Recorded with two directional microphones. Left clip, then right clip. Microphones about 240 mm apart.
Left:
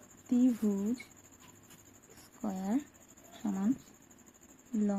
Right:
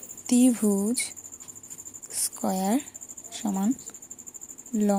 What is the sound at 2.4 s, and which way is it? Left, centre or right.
Speech, right.